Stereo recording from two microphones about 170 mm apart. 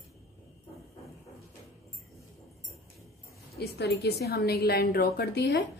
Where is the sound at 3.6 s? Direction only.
70° left (ahead or behind).